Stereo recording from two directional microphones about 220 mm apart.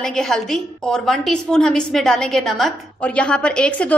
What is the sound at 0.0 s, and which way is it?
A woman's voice, centre (ahead or behind).